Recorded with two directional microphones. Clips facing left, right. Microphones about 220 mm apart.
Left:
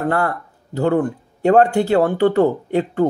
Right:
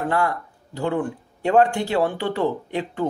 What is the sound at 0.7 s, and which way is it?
Speech, 40° left (ahead or behind).